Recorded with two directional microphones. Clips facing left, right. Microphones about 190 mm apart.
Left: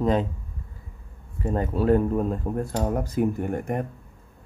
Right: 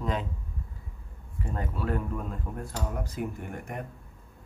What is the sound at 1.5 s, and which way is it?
Speech, 30° left (ahead or behind).